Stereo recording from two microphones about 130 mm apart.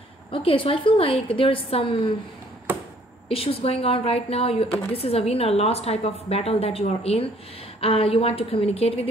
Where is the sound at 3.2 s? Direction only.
45° left (ahead or behind).